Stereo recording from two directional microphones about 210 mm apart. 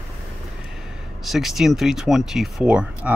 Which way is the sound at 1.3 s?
Centre (ahead or behind).